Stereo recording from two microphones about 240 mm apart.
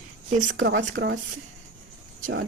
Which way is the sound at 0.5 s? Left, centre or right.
Right.